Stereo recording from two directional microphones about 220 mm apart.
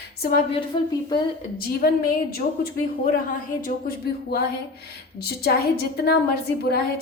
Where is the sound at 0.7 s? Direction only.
25° left (ahead or behind).